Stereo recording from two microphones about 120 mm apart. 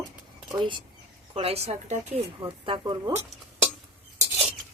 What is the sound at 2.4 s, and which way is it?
Speech, 45° right (ahead or behind).